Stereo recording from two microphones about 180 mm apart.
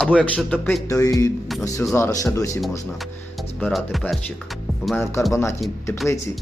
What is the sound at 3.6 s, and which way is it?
Speech, centre (ahead or behind).